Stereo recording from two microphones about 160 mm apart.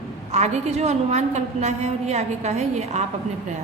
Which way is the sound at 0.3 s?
45° right (ahead or behind).